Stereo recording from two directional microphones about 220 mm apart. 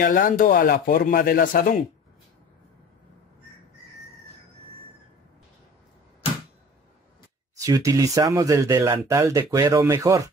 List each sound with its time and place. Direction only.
0.0 s speech: 40° left (ahead or behind)
7.5 s speech: 15° right (ahead or behind)